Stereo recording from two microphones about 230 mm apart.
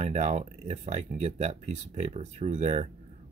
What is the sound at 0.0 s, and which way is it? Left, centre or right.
Speech, right.